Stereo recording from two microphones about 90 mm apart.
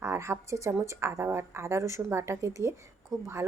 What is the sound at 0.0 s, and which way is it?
A woman's voice, 35° right (ahead or behind).